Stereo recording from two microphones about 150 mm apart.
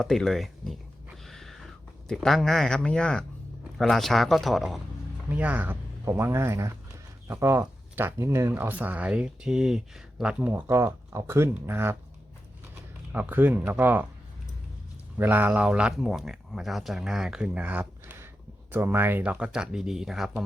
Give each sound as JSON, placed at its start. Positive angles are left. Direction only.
{"t": 0.0, "sound": "a sound", "side_deg": 0}
{"t": 3.8, "sound": "speech", "side_deg": 0}
{"t": 5.3, "sound": "speech", "side_deg": -10}
{"t": 13.1, "sound": "speech", "side_deg": -10}
{"t": 15.2, "sound": "speech", "side_deg": -10}